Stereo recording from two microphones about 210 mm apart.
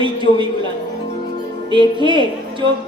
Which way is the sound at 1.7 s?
25° right (ahead or behind).